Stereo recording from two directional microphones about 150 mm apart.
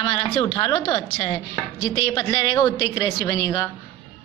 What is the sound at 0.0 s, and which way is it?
A woman's voice, 35° left (ahead or behind).